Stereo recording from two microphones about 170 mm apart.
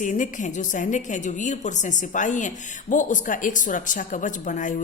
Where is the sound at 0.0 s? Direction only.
50° left (ahead or behind).